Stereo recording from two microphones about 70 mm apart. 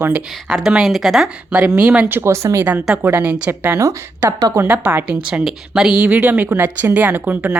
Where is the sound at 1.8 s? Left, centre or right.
Right.